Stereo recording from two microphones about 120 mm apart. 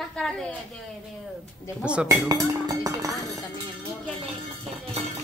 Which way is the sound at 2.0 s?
30° right (ahead or behind).